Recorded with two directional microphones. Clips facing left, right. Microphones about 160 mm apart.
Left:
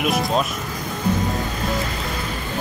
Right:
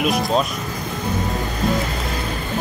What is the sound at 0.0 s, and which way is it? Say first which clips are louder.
Speech: right 2 dB; centre (ahead or behind).